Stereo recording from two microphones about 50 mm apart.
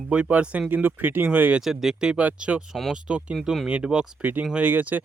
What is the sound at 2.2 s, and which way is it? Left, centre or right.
Speech, right.